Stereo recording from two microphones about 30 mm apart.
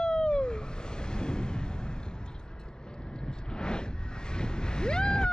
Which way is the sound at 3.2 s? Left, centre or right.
Left.